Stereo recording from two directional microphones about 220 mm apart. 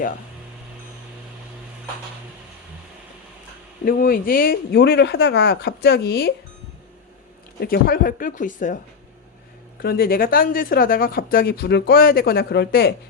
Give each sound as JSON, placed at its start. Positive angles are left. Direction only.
{"t": 3.8, "sound": "speech", "side_deg": 40}
{"t": 7.6, "sound": "speech", "side_deg": 40}
{"t": 9.8, "sound": "speech", "side_deg": 45}